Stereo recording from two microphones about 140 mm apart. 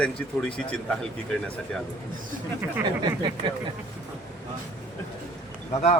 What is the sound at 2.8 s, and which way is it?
Speech, 35° right (ahead or behind).